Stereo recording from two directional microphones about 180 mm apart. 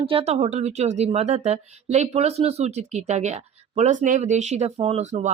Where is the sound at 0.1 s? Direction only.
35° right (ahead or behind).